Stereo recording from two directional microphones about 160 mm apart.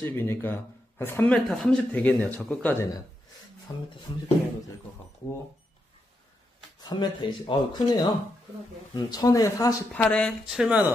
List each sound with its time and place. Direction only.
0.0 s speech: 15° left (ahead or behind)
3.7 s speech: 20° left (ahead or behind)
6.9 s speech: 30° left (ahead or behind)
9.9 s speech: 5° left (ahead or behind)
10.5 s speech: 5° right (ahead or behind)